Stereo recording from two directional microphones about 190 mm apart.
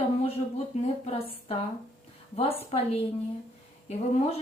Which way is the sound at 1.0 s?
30° left (ahead or behind).